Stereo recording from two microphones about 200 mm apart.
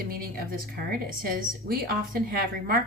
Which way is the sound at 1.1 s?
45° right (ahead or behind).